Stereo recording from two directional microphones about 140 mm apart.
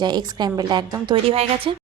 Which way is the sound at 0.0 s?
30° right (ahead or behind).